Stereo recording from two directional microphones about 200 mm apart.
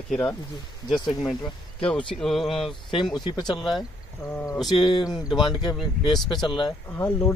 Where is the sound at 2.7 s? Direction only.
25° left (ahead or behind).